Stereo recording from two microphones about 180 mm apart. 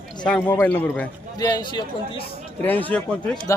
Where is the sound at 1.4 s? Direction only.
20° left (ahead or behind).